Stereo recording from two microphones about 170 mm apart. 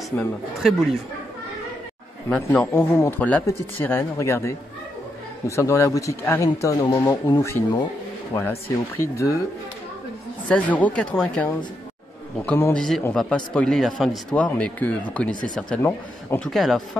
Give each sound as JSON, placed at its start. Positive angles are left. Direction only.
{"t": 0.2, "sound": "speech", "side_deg": 0}
{"t": 2.2, "sound": "speech", "side_deg": 10}
{"t": 5.6, "sound": "speech", "side_deg": 15}
{"t": 10.5, "sound": "speech", "side_deg": 10}